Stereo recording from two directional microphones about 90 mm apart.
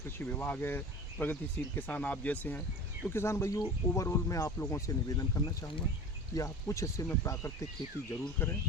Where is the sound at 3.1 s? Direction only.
30° left (ahead or behind).